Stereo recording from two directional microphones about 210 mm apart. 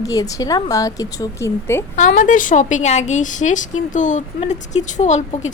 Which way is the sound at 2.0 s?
35° left (ahead or behind).